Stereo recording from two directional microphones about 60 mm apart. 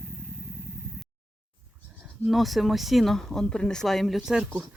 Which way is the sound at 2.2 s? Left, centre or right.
Centre.